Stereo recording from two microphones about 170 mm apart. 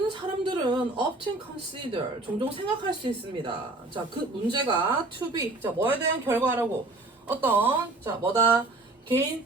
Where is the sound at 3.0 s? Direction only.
30° right (ahead or behind).